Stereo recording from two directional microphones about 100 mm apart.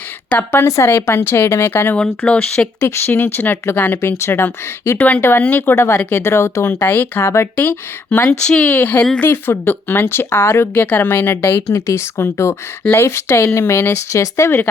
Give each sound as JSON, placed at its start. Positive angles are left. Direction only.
{"t": 0.3, "sound": "speech", "side_deg": 20}
{"t": 2.0, "sound": "speech", "side_deg": 10}
{"t": 2.8, "sound": "speech", "side_deg": 25}